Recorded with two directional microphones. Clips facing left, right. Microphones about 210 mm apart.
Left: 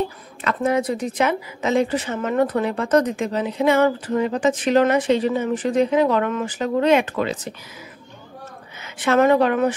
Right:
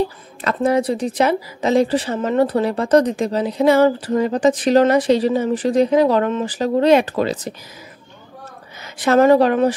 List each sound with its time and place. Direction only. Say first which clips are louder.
0.4 s a woman's voice: right 3 dB; 35° right (ahead or behind)
8.8 s a woman's voice: right 4 dB; 40° right (ahead or behind)